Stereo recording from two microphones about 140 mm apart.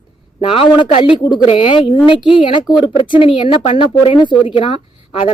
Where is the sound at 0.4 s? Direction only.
40° left (ahead or behind).